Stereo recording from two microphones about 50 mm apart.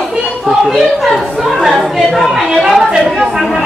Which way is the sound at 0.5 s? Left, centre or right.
Centre.